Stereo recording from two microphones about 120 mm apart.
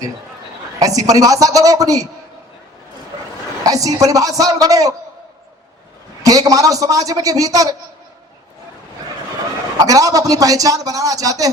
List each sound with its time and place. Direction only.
0.8 s a man's voice: 30° right (ahead or behind)
3.7 s a man's voice: 30° right (ahead or behind)
6.2 s a man's voice: 30° right (ahead or behind)
9.8 s a man's voice: 30° right (ahead or behind)